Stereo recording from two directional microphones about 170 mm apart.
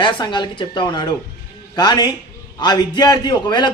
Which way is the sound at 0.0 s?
25° left (ahead or behind).